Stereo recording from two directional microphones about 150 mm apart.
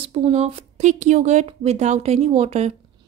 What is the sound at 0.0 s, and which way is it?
Speech, 40° right (ahead or behind).